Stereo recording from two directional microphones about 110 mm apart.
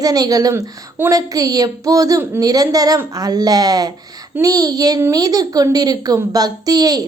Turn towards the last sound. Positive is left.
turn(degrees=-35)  # may be behind; listen again after turning